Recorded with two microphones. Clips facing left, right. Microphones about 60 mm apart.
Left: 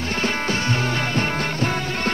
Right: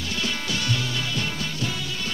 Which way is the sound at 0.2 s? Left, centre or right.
Left.